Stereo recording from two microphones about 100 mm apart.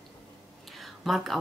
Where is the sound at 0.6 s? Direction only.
Centre (ahead or behind).